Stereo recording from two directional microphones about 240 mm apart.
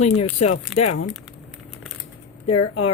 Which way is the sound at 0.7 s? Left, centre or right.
Left.